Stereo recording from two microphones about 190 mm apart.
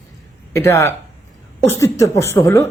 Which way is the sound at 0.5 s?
15° left (ahead or behind).